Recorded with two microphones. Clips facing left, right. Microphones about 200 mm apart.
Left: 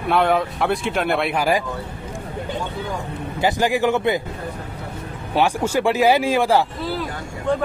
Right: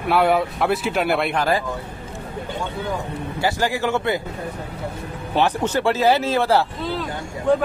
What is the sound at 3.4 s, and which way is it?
Speech, 15° left (ahead or behind).